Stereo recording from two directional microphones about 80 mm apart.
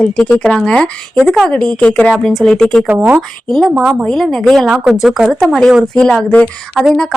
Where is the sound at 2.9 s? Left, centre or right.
Right.